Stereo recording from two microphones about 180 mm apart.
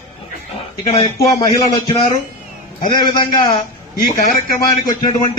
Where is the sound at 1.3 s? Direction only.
20° left (ahead or behind).